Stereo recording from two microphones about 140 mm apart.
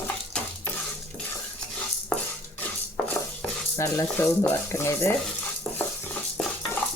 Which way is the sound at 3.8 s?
15° left (ahead or behind).